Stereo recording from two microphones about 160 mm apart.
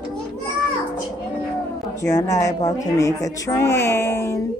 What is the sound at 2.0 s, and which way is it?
Speech, 20° left (ahead or behind).